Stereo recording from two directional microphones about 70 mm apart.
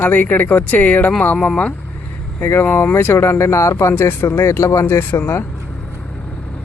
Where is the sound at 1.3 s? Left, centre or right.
Centre.